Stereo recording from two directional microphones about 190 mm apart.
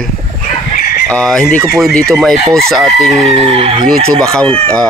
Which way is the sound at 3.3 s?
30° right (ahead or behind).